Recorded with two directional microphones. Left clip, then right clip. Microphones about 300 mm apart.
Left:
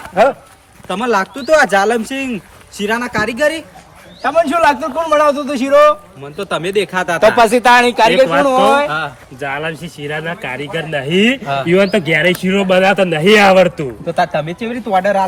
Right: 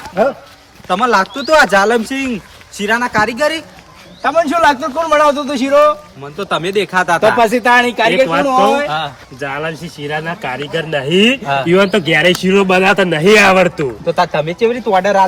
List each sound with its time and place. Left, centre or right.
0.9 s speech: centre
1.7 s speech: centre